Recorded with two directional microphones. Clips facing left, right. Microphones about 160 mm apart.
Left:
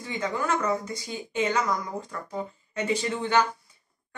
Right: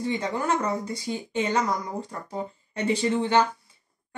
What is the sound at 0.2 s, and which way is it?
Speech, 30° right (ahead or behind).